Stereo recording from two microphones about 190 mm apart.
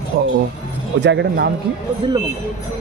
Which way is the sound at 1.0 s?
65° right (ahead or behind).